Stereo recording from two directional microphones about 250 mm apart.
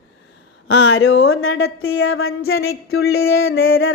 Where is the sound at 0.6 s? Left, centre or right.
Left.